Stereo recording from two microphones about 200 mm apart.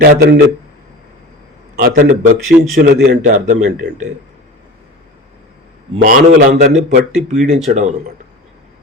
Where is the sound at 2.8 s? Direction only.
55° right (ahead or behind).